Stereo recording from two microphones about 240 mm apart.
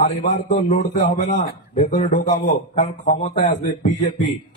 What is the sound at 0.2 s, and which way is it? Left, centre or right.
A man's voice, left.